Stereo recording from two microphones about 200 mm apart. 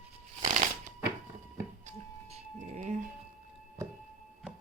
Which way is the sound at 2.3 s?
35° right (ahead or behind).